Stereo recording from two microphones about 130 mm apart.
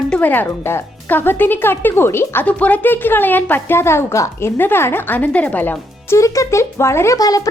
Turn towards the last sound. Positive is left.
turn(degrees=30)  # may be behind; listen again after turning